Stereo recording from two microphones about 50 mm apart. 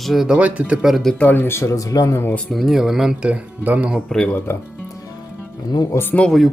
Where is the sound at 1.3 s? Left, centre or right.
Left.